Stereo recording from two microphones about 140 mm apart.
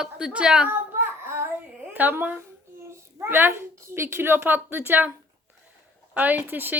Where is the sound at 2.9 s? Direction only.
20° right (ahead or behind).